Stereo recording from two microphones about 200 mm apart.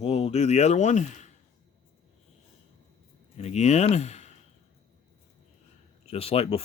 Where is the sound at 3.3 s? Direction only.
35° left (ahead or behind).